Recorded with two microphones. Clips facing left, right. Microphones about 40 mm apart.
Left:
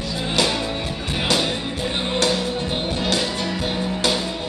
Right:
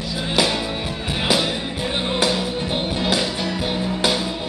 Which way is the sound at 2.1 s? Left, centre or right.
Centre.